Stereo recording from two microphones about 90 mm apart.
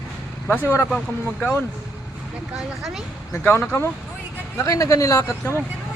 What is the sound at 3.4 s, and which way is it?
Speech, 20° left (ahead or behind).